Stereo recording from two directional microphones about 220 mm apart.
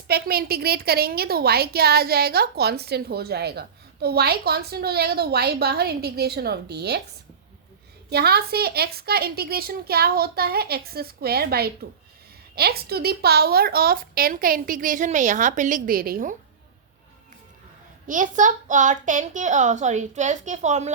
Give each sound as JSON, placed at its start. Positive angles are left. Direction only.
{"t": 0.1, "sound": "a woman's voice", "side_deg": -45}
{"t": 8.1, "sound": "a woman's voice", "side_deg": -45}
{"t": 18.1, "sound": "a woman's voice", "side_deg": -35}